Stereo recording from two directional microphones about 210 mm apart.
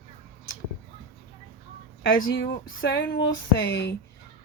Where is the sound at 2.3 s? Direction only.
60° left (ahead or behind).